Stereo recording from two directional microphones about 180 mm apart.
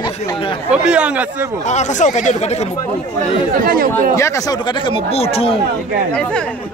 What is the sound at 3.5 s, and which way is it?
Speech, 55° right (ahead or behind).